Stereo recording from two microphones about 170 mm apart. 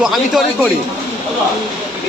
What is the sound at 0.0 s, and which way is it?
Speech, centre (ahead or behind).